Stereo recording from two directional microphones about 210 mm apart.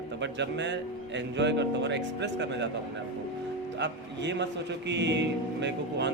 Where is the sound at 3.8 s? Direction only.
55° right (ahead or behind).